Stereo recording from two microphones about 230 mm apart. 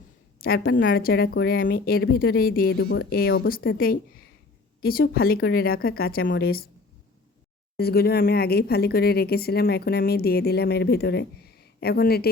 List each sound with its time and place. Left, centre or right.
0.3 s a woman's voice: left
7.8 s speech: left